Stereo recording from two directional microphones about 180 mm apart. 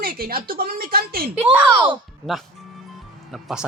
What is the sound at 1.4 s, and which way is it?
Speech, 10° right (ahead or behind).